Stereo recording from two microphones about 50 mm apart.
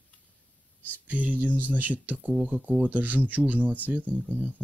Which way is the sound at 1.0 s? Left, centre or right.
Right.